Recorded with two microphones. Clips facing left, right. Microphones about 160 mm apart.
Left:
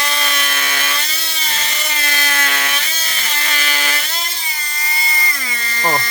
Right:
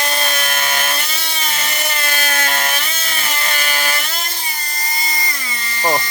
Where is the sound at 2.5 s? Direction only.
45° right (ahead or behind).